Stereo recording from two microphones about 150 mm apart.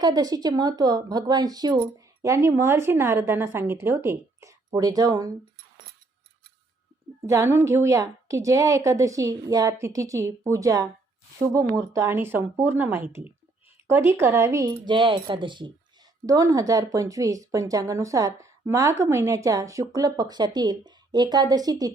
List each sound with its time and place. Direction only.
0.0 s speech: 25° right (ahead or behind)
7.2 s speech: 20° right (ahead or behind)